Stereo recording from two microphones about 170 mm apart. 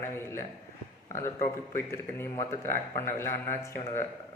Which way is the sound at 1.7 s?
15° left (ahead or behind).